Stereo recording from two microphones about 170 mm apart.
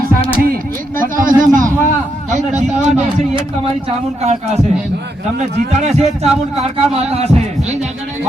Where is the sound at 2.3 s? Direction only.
45° right (ahead or behind).